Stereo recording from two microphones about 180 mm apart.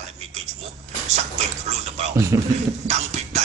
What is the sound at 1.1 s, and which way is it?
Dog, 40° right (ahead or behind).